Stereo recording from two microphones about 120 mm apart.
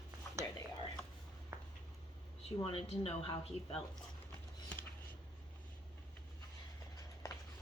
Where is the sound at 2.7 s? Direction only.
55° left (ahead or behind).